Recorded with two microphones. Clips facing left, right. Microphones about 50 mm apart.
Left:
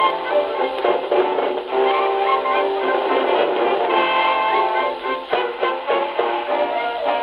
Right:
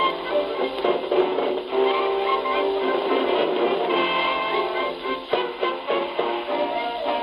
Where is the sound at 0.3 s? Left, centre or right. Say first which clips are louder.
Left 4 dB; centre.